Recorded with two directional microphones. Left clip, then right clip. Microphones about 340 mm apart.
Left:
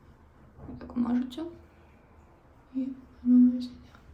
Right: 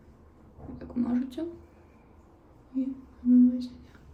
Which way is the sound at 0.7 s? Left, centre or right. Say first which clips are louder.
Even; centre.